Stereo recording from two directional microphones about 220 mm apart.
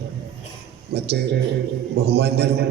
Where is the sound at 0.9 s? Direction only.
45° right (ahead or behind).